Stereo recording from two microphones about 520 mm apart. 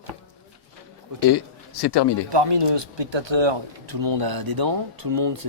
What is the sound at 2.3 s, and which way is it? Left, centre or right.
Speech, right.